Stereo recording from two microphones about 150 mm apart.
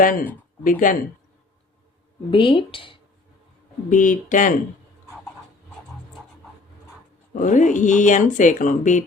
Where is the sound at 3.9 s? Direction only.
60° left (ahead or behind).